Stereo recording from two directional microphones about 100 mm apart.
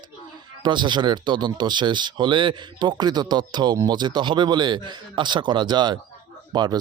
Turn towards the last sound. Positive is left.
turn(degrees=-45)  # may be behind; listen again after turning